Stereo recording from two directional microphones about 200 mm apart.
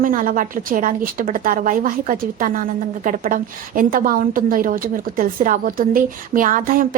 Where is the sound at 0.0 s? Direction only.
45° right (ahead or behind).